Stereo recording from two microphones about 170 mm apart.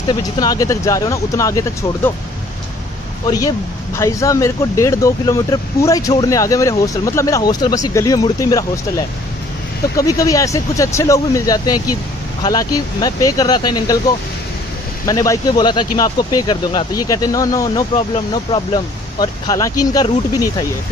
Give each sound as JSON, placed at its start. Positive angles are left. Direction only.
{"t": 0.1, "sound": "speech", "side_deg": 25}
{"t": 3.3, "sound": "speech", "side_deg": 20}